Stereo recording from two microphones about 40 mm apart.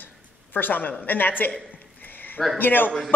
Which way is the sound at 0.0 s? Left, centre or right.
Left.